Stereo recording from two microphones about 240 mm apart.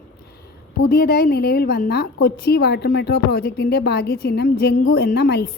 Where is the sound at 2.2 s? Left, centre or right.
Left.